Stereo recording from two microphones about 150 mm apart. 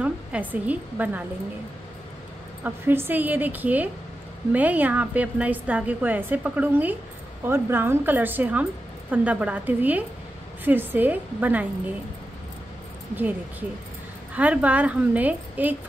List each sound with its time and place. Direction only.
0.0 s a woman's voice: 10° right (ahead or behind)
2.6 s a woman's voice: 15° right (ahead or behind)
13.1 s a woman's voice: 10° right (ahead or behind)